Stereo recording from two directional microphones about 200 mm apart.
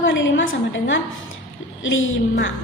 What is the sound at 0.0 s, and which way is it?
A woman's voice, 70° left (ahead or behind).